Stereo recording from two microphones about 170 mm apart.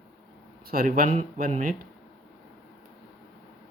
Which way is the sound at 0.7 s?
60° right (ahead or behind).